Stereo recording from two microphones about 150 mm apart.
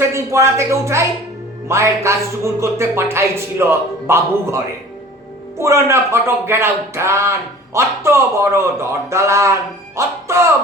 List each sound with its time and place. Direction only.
0.0 s speech: 20° right (ahead or behind)